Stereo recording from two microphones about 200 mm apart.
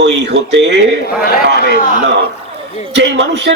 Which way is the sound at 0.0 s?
60° right (ahead or behind).